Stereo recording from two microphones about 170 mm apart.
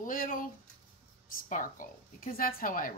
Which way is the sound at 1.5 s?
50° left (ahead or behind).